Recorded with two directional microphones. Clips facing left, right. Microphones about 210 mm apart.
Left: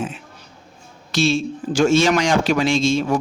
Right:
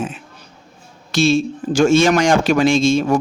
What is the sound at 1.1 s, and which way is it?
A man's voice, 45° right (ahead or behind).